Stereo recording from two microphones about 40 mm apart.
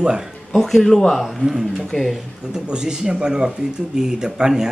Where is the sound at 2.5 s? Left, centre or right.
Right.